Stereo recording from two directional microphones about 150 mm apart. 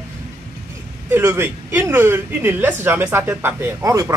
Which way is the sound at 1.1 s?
15° right (ahead or behind).